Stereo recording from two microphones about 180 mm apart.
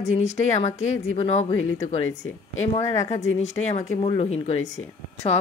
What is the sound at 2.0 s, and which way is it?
Speech, 90° left.